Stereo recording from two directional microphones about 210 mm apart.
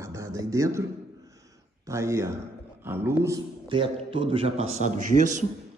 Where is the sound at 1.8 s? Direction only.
15° right (ahead or behind).